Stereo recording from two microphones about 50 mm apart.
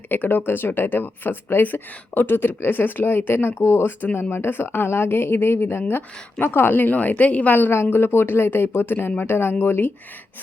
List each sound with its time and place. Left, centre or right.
0.1 s speech: left
3.8 s a woman's voice: left
7.7 s speech: left